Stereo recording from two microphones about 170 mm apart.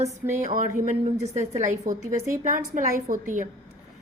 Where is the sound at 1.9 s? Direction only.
50° right (ahead or behind).